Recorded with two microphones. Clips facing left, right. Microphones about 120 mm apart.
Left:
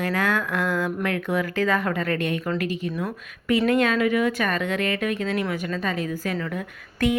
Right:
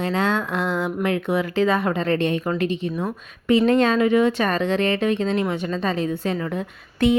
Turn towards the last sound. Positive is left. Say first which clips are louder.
# right 4 dB
turn(degrees=-25)  # may be behind; listen again after turning